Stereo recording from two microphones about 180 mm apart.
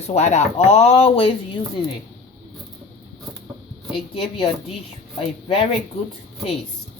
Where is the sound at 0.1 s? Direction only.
40° left (ahead or behind).